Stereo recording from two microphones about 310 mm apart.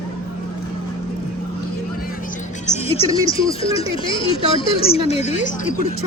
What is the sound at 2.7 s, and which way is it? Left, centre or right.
Speech, centre.